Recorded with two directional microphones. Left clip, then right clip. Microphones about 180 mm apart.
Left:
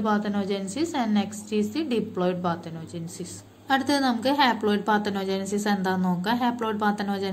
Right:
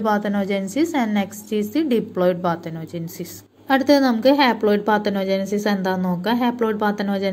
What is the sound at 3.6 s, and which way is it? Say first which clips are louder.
A woman's voice: right 7 dB; 30° right (ahead or behind).